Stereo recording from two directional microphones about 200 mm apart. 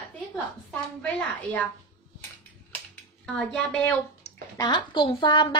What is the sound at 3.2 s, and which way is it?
Speech, 5° left (ahead or behind).